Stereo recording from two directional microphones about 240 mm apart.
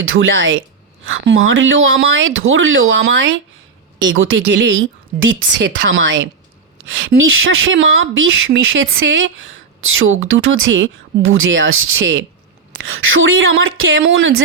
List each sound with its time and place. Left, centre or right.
0.0 s a woman's voice: right